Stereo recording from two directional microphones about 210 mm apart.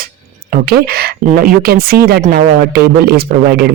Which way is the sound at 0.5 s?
45° right (ahead or behind).